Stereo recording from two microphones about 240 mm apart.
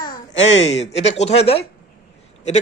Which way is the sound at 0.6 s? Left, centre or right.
Left.